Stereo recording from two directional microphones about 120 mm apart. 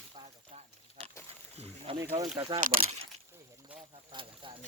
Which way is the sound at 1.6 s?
50° right (ahead or behind).